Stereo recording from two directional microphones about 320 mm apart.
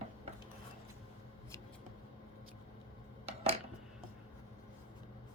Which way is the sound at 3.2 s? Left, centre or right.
Centre.